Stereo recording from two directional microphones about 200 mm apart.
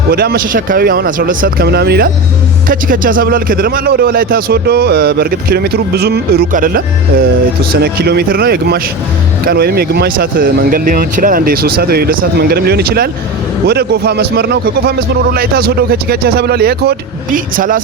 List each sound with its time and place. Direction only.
0.1 s speech: 50° right (ahead or behind)
2.6 s speech: 45° right (ahead or behind)